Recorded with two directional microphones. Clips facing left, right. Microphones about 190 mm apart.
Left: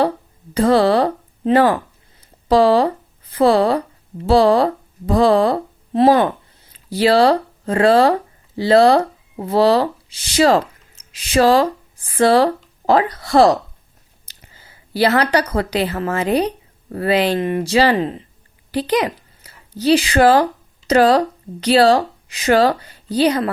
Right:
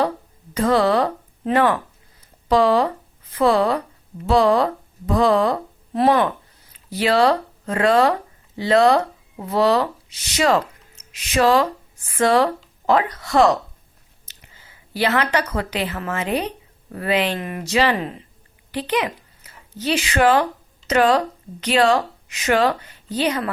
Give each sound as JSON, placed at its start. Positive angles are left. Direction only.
{"t": 0.5, "sound": "a woman's voice", "side_deg": 30}